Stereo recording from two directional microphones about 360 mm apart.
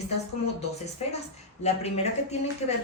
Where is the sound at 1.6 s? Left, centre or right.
Centre.